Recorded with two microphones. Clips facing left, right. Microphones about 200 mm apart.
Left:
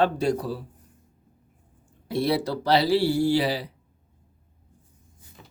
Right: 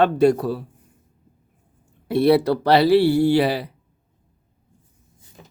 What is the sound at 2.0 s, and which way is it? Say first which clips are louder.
Speech: right 8 dB; 60° right (ahead or behind).